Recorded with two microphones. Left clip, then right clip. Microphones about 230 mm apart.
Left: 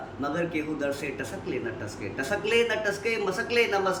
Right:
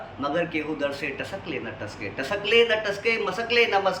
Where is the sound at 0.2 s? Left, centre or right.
Centre.